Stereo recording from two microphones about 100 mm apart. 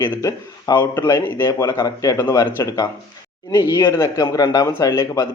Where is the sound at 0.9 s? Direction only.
25° left (ahead or behind).